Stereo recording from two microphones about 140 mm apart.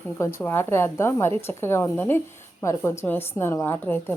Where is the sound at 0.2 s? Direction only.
15° left (ahead or behind).